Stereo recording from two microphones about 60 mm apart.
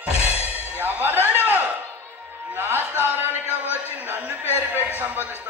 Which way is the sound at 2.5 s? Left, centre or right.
Right.